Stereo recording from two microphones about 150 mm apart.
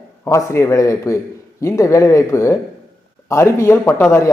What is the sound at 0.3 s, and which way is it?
A man's voice, 20° left (ahead or behind).